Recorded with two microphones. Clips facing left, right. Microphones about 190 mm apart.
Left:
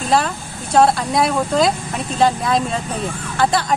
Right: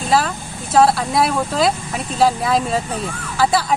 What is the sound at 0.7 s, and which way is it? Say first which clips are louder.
Speech: even; centre (ahead or behind).